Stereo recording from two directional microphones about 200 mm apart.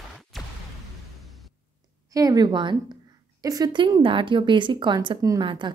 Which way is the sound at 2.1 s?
20° right (ahead or behind).